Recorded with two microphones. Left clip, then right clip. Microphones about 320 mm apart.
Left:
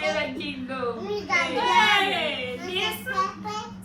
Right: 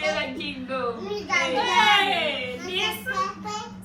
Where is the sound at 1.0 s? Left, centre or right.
Left.